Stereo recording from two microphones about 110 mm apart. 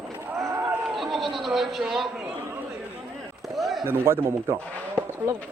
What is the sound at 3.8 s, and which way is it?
Speech, 20° right (ahead or behind).